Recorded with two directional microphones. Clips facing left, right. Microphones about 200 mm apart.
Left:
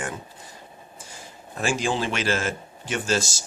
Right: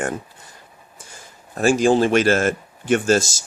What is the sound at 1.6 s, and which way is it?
Speech, 40° right (ahead or behind).